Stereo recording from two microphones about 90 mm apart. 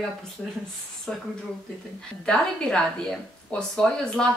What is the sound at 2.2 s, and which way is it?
A woman's voice, 5° left (ahead or behind).